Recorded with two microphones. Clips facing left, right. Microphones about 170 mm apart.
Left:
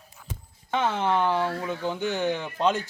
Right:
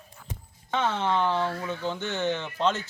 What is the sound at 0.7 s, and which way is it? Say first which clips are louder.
Speech: left 2 dB; 10° left (ahead or behind).